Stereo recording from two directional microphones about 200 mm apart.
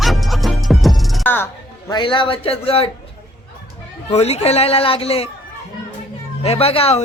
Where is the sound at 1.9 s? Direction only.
25° left (ahead or behind).